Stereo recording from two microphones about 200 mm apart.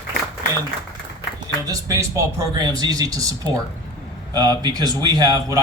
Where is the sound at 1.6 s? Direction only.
15° right (ahead or behind).